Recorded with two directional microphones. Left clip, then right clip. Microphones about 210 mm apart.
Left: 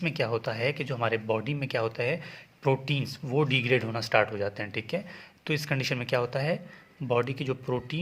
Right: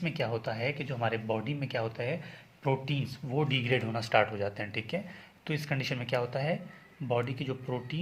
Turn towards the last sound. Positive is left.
turn(degrees=30)  # may be behind; listen again after turning